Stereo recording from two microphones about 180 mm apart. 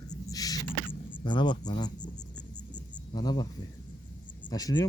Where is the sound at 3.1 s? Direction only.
20° left (ahead or behind).